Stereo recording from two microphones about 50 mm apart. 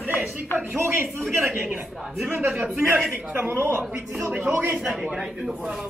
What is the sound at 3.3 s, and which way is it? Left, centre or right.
A man's voice, right.